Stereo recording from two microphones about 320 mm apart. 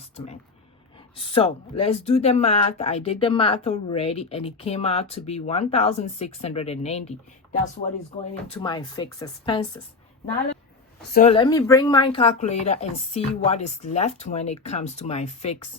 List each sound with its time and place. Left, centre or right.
1.1 s speech: centre
8.4 s speech: centre
11.0 s speech: left